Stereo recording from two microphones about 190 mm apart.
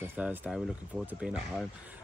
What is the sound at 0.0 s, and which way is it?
Speech, 10° right (ahead or behind).